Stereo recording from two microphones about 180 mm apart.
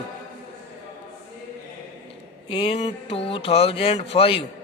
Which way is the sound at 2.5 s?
30° left (ahead or behind).